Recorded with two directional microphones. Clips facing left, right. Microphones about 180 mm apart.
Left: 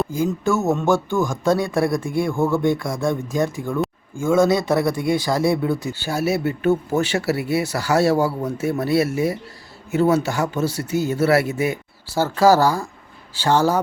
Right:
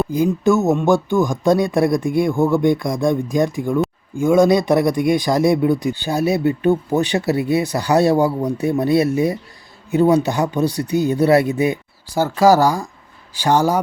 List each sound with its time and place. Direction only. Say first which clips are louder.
0.1 s a man's voice: right 5 dB; 15° right (ahead or behind)